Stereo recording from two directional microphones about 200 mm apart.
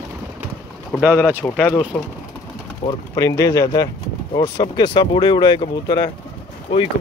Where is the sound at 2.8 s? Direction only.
20° left (ahead or behind).